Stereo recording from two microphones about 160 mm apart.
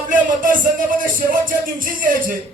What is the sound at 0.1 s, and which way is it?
Music, 55° right (ahead or behind).